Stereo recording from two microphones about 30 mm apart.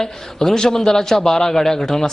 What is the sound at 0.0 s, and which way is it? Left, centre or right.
A man's voice, centre.